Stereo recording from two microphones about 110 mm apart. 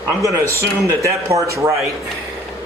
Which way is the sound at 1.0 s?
30° right (ahead or behind).